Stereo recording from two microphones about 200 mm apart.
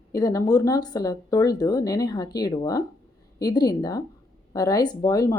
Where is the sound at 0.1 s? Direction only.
15° left (ahead or behind).